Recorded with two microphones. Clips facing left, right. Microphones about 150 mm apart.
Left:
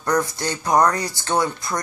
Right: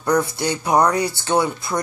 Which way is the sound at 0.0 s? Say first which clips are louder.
Right 2 dB; 10° right (ahead or behind).